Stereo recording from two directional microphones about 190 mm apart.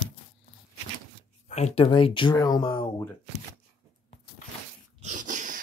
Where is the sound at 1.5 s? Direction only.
35° left (ahead or behind).